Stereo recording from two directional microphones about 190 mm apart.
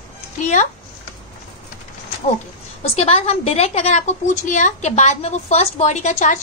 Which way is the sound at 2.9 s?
30° left (ahead or behind).